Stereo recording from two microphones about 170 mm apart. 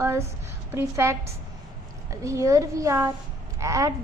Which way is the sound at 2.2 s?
20° right (ahead or behind).